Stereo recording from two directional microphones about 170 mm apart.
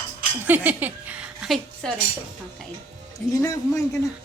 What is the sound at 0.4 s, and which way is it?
A woman's voice, 10° right (ahead or behind).